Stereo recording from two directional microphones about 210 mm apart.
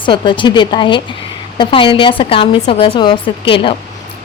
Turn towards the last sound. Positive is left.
turn(degrees=25)  # may be behind; listen again after turning